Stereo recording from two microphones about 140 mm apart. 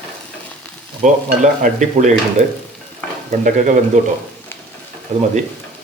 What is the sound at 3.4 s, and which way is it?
Stir, 65° right (ahead or behind).